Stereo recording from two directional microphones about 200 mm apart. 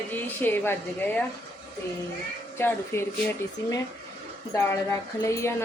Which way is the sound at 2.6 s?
10° left (ahead or behind).